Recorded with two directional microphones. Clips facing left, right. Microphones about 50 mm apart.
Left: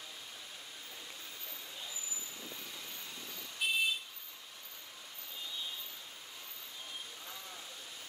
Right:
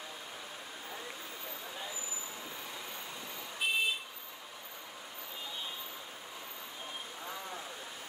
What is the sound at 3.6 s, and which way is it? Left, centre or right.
Vehicle, right.